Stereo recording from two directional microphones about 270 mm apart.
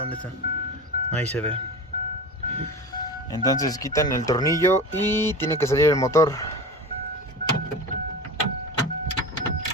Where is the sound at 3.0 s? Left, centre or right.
Centre.